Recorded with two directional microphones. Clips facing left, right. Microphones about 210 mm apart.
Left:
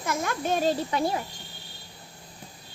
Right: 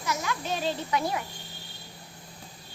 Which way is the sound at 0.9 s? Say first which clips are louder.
Left 2 dB; 30° left (ahead or behind).